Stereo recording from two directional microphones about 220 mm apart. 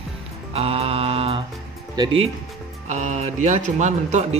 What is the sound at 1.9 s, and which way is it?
Speech, 20° right (ahead or behind).